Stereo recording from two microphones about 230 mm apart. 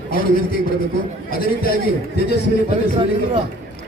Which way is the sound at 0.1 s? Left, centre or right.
Left.